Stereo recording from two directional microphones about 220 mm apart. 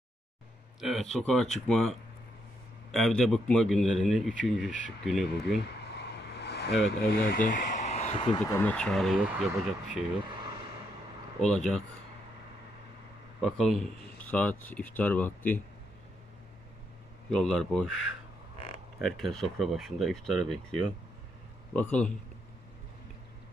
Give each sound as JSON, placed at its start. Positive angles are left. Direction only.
{"t": 0.7, "sound": "speech", "side_deg": 0}
{"t": 5.9, "sound": "vehicle", "side_deg": 50}
{"t": 8.4, "sound": "speech", "side_deg": 10}
{"t": 10.2, "sound": "vehicle", "side_deg": -20}
{"t": 11.4, "sound": "speech", "side_deg": 5}
{"t": 13.4, "sound": "speech", "side_deg": 0}
{"t": 17.3, "sound": "speech", "side_deg": 5}
{"t": 21.7, "sound": "speech", "side_deg": 5}